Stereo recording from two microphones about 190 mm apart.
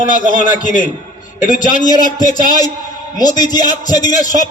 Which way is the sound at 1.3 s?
45° left (ahead or behind).